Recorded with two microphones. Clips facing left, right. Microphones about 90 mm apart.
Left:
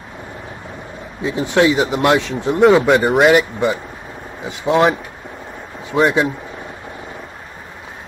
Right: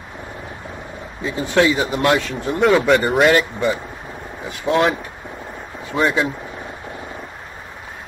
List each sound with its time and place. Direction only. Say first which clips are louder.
1.2 s speech: left 2 dB; 20° left (ahead or behind)